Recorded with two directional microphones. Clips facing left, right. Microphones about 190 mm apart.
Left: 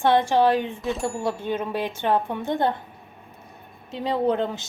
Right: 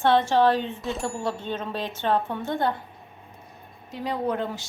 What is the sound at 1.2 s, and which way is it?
A woman's voice, 15° left (ahead or behind).